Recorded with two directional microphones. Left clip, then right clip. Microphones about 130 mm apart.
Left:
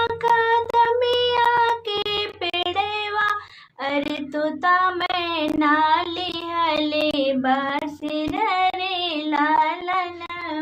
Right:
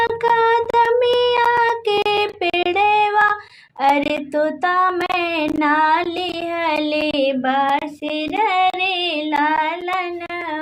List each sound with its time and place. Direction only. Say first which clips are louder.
0.3 s child singing: right 3 dB; 40° right (ahead or behind)
5.5 s female singing: right 2 dB; 40° right (ahead or behind)
6.6 s child singing: right 1 dB; 35° right (ahead or behind)
7.1 s female singing: right 2 dB; 25° right (ahead or behind)